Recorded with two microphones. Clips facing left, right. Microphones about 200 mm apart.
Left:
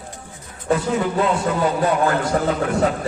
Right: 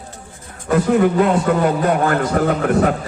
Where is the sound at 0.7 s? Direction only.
55° right (ahead or behind).